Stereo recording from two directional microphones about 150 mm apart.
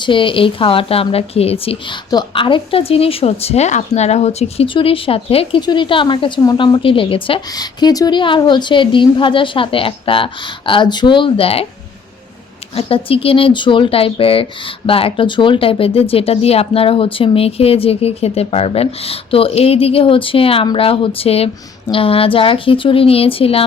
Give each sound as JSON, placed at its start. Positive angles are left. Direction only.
{"t": 0.0, "sound": "speech", "side_deg": 35}
{"t": 12.7, "sound": "speech", "side_deg": 40}